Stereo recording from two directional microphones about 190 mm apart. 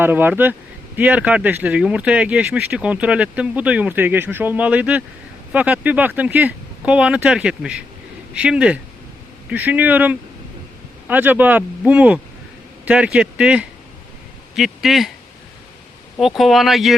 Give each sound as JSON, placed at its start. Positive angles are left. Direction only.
{"t": 0.0, "sound": "speech", "side_deg": -10}
{"t": 16.1, "sound": "speech", "side_deg": 0}